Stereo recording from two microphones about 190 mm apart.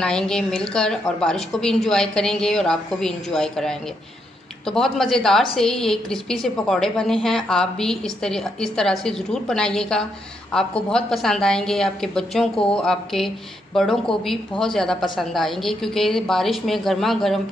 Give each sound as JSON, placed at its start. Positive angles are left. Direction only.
{"t": 0.0, "sound": "a woman's voice", "side_deg": 5}